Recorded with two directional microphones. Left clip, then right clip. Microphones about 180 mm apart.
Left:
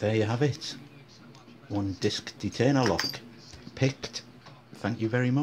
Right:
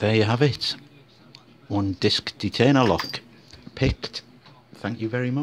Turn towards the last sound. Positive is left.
turn(degrees=-10)  # may be behind; listen again after turning